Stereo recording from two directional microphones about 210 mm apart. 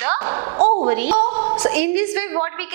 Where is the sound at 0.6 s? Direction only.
35° right (ahead or behind).